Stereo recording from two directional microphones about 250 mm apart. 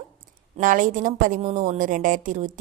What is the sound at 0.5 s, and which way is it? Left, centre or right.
A woman's voice, right.